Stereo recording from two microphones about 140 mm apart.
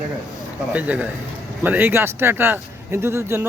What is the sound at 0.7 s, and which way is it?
A man's voice, 10° right (ahead or behind).